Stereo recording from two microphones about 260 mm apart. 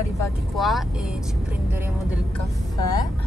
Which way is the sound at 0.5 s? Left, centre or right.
Centre.